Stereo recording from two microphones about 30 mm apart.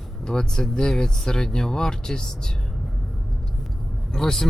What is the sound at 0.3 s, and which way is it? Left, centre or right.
Speech, left.